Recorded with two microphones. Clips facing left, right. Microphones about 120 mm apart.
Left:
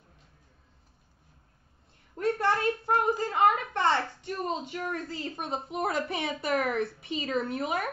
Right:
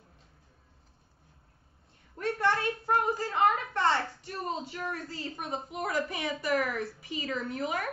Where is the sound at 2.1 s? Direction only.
25° left (ahead or behind).